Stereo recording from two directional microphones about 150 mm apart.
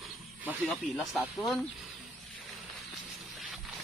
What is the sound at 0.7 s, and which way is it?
Speech, centre (ahead or behind).